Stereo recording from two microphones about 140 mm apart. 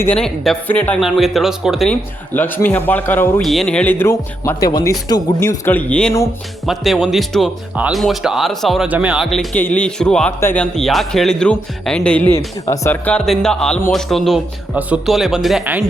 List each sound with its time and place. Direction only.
0.2 s speech: 10° left (ahead or behind)
1.0 s speech: centre (ahead or behind)
1.9 s speech: 15° left (ahead or behind)
3.4 s speech: centre (ahead or behind)